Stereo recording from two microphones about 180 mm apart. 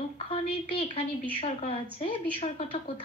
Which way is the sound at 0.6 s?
30° left (ahead or behind).